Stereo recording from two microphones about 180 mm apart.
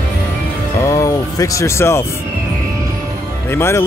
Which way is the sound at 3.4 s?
15° left (ahead or behind).